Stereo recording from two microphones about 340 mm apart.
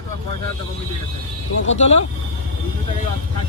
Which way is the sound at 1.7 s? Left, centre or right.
Centre.